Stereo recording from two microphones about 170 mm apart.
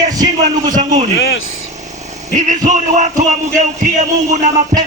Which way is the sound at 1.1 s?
90° left.